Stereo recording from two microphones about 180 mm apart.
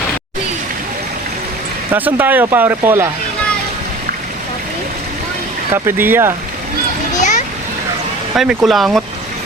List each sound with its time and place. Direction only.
1.9 s speech: 10° right (ahead or behind)
5.7 s speech: 15° right (ahead or behind)
7.2 s children playing: 40° left (ahead or behind)
8.4 s speech: centre (ahead or behind)